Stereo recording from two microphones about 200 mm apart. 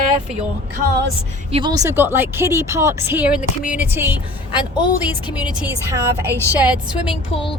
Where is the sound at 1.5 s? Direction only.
30° right (ahead or behind).